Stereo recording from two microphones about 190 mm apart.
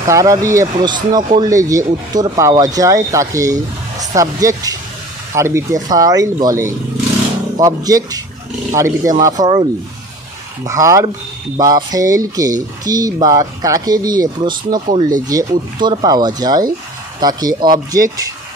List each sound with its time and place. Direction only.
0.0 s speech: 15° right (ahead or behind)